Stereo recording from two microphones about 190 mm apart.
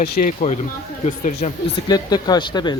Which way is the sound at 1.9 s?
20° left (ahead or behind).